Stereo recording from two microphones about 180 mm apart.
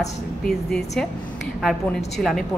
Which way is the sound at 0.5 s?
5° left (ahead or behind).